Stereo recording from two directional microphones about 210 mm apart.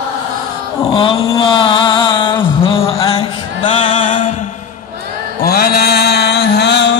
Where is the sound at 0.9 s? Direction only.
25° left (ahead or behind).